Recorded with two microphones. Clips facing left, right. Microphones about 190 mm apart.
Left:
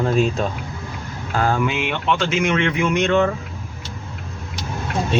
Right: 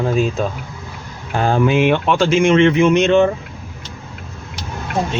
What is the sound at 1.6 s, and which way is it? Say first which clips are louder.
Speech: right 7 dB; 45° right (ahead or behind).